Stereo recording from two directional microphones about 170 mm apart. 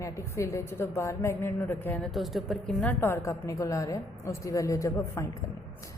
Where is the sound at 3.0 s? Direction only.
15° left (ahead or behind).